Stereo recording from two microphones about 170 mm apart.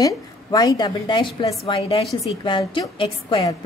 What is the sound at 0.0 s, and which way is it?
A woman's voice, 25° left (ahead or behind).